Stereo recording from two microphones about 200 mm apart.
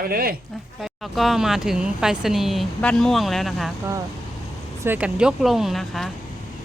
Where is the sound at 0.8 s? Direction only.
Centre (ahead or behind).